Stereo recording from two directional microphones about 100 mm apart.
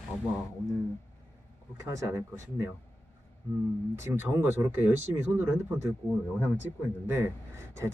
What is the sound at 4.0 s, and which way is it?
Speech, 25° right (ahead or behind).